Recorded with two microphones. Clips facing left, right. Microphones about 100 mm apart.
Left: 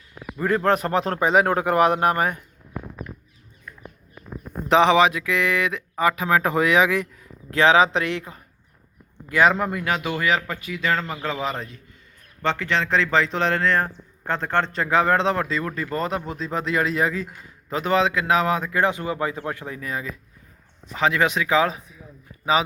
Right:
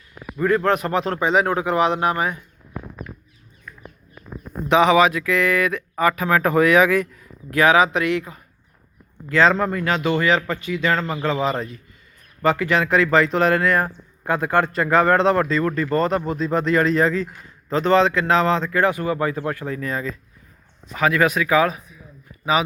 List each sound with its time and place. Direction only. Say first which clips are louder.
0.3 s speech: right 2 dB; 30° left (ahead or behind); by 2.4 s 50° left (ahead or behind)
4.7 s speech: right 1 dB; 35° left (ahead or behind)
9.3 s a man's voice: right 2 dB; 15° left (ahead or behind)
20.9 s speech: right 2 dB; 25° left (ahead or behind)